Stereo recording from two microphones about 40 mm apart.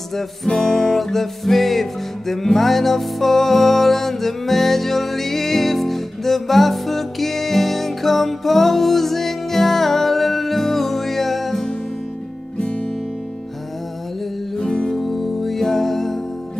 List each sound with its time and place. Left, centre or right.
0.6 s music: centre
14.6 s music: centre
15.0 s music: centre